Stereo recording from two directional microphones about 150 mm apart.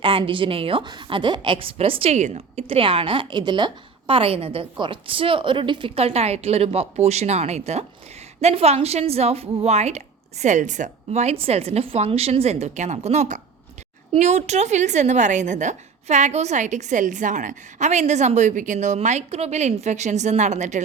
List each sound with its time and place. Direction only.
0.0 s a woman's voice: 35° right (ahead or behind); by 20.8 s 50° right (ahead or behind)